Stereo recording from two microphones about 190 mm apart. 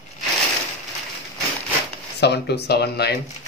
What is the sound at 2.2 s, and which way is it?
Speech, 60° left (ahead or behind).